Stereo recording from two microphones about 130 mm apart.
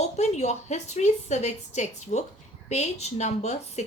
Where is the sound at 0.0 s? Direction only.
60° left (ahead or behind).